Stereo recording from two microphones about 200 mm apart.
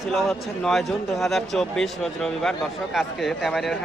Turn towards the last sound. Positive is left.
turn(degrees=0)  # may be behind; listen again after turning